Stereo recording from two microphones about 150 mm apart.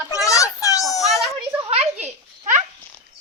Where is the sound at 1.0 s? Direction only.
Centre (ahead or behind).